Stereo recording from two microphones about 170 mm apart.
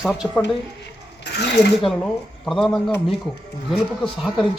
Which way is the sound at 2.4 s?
5° left (ahead or behind).